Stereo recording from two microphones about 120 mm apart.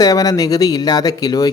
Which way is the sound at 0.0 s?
30° left (ahead or behind).